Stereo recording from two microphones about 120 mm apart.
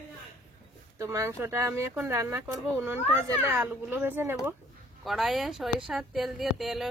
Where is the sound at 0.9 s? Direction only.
25° right (ahead or behind).